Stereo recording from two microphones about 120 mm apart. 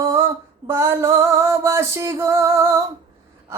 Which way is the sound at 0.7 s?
20° right (ahead or behind).